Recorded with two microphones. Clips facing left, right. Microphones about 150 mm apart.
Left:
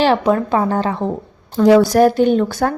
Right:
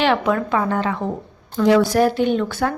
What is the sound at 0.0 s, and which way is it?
A woman's voice, 35° left (ahead or behind).